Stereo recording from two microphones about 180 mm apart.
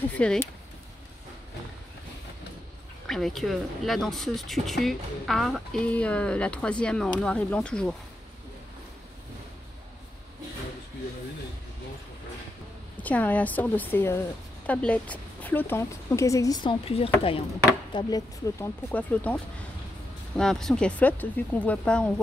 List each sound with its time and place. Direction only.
0.1 s speech: 5° left (ahead or behind)
3.1 s speech: centre (ahead or behind)
12.9 s speech: 10° left (ahead or behind); by 17.4 s 30° left (ahead or behind)
17.9 s speech: 20° left (ahead or behind)